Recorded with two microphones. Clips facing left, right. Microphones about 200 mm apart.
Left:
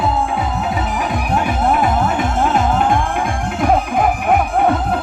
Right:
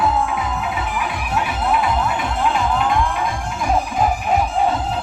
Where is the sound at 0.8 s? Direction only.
45° left (ahead or behind); by 4.9 s 60° left (ahead or behind).